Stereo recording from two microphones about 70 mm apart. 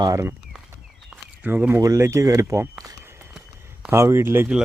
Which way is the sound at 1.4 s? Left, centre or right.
Right.